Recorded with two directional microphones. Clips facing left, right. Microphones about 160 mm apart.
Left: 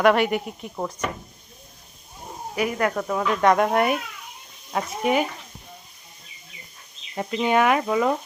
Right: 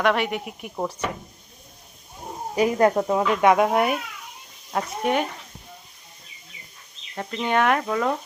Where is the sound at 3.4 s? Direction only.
10° right (ahead or behind).